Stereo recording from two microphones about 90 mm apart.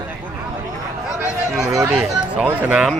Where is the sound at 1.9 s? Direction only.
20° right (ahead or behind).